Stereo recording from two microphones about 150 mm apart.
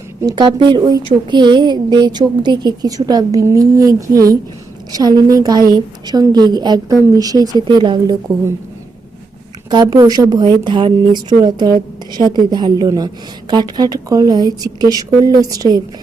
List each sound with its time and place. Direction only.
0.2 s a woman's voice: 30° right (ahead or behind)
9.9 s a woman's voice: 25° right (ahead or behind)